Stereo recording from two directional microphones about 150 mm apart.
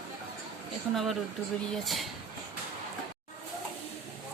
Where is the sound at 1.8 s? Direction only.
Centre (ahead or behind).